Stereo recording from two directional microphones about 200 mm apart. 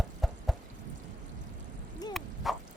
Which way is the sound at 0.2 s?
Centre (ahead or behind).